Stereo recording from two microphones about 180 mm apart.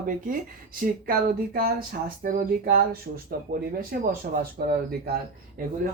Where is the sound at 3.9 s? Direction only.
55° right (ahead or behind).